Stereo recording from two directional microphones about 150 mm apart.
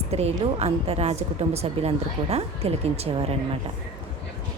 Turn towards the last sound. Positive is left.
turn(degrees=-45)  # may be behind; listen again after turning